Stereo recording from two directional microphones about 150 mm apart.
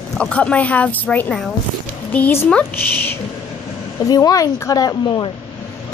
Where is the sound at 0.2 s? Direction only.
10° left (ahead or behind); by 5.3 s 30° left (ahead or behind).